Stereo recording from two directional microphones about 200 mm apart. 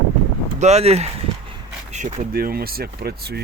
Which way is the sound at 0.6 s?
35° right (ahead or behind).